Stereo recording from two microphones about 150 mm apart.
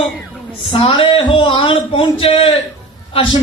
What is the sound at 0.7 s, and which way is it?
A man's voice, 35° left (ahead or behind).